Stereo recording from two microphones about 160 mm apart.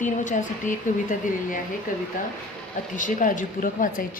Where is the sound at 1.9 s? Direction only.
55° left (ahead or behind).